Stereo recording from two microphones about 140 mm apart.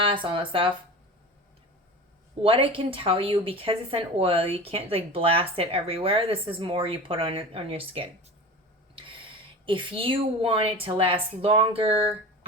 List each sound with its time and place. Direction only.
0.0 s speech: 35° right (ahead or behind)
2.4 s speech: 40° right (ahead or behind)